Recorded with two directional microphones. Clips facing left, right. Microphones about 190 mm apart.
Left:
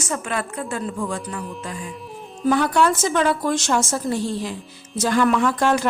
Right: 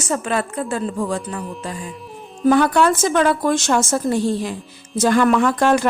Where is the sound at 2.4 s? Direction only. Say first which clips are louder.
Right 4 dB; 55° right (ahead or behind).